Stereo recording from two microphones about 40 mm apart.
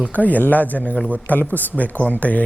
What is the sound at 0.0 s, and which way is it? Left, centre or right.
Speech, left.